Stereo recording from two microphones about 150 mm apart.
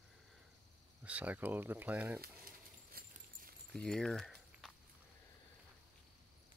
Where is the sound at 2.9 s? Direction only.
75° right (ahead or behind).